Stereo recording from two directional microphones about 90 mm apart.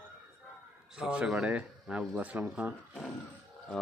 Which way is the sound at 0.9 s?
10° right (ahead or behind).